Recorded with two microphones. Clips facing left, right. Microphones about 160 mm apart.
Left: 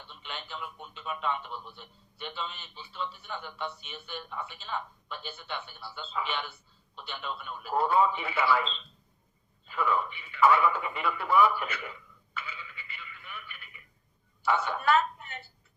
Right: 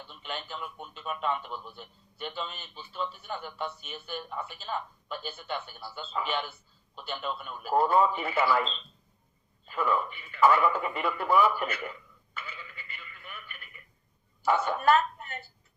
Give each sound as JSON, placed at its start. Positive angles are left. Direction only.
{"t": 0.1, "sound": "a man's voice", "side_deg": -45}
{"t": 12.3, "sound": "telephone", "side_deg": -50}
{"t": 14.4, "sound": "a woman's voice", "side_deg": -45}